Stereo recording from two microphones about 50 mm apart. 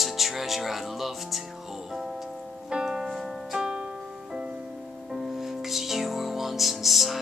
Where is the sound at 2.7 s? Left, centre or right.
Centre.